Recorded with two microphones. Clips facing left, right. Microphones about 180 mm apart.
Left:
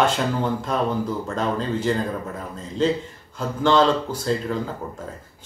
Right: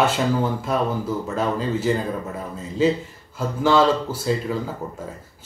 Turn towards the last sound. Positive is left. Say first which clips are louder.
# right 1 dB
turn(degrees=-5)  # may be behind; listen again after turning